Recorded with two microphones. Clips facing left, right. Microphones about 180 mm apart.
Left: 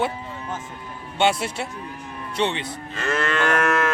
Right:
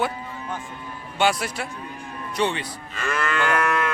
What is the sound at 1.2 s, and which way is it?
Speech, 25° left (ahead or behind).